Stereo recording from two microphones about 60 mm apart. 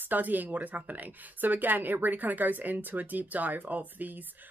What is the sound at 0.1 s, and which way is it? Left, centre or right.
Speech, right.